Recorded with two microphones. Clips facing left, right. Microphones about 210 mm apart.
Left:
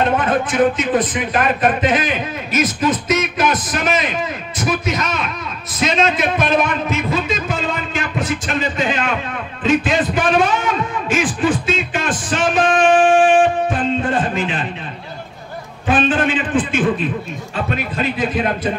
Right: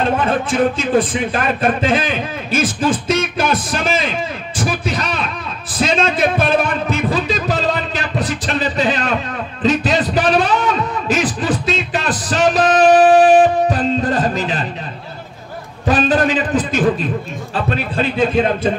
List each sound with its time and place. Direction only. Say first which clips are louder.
0.7 s a man's voice: right 2 dB; 30° right (ahead or behind)
4.6 s a sound: left 1 dB; 30° right (ahead or behind)
15.9 s a man's voice: right 1 dB; 40° right (ahead or behind)